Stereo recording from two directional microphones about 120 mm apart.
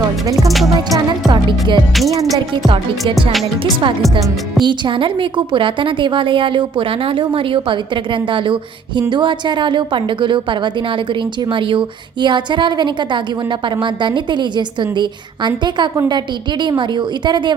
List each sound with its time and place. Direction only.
0.4 s music: centre (ahead or behind)
0.9 s a woman's voice: 40° right (ahead or behind)
4.6 s a woman's voice: 45° right (ahead or behind)